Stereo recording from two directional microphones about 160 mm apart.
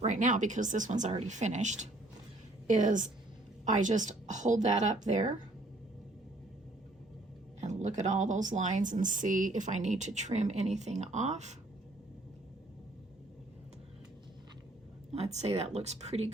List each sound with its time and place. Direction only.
0.0 s speech: 50° right (ahead or behind)
7.6 s speech: 50° right (ahead or behind)
15.1 s speech: 40° right (ahead or behind)